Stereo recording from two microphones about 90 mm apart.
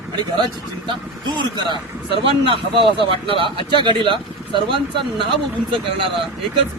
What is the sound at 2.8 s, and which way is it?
Speech, 70° right (ahead or behind).